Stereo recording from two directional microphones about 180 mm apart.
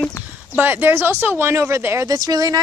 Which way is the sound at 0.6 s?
10° right (ahead or behind).